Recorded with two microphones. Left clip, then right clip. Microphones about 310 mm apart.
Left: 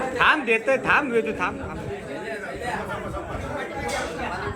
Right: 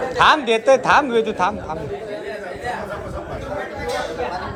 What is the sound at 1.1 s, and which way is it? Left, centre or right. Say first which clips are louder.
Speech: right 4 dB; right.